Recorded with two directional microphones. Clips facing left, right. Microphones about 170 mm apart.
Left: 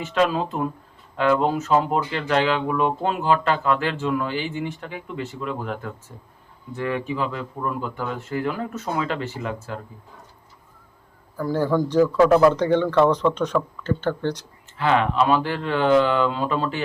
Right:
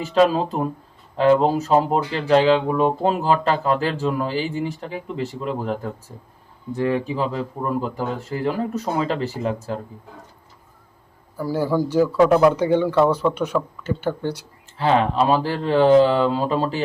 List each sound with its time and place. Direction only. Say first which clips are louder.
0.0 s speech: right 4 dB; 35° right (ahead or behind)
11.3 s speech: even; 10° right (ahead or behind)
14.8 s speech: right 2 dB; 35° right (ahead or behind)